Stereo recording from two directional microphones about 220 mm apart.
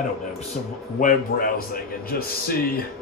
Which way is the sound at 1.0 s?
40° left (ahead or behind).